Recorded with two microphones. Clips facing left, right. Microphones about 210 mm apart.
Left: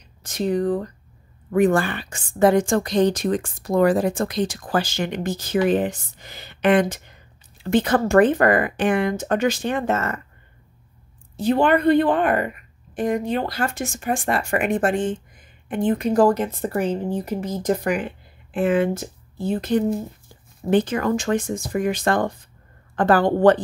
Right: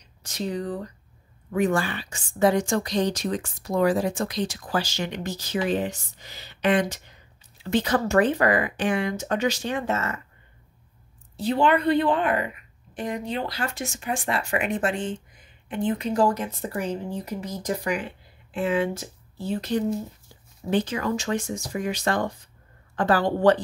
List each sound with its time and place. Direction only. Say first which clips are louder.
0.2 s a woman's voice: left 7 dB; 50° left (ahead or behind)
11.3 s a woman's voice: left 4 dB; 50° left (ahead or behind)